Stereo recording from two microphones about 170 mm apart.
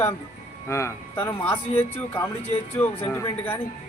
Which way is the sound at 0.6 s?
15° left (ahead or behind).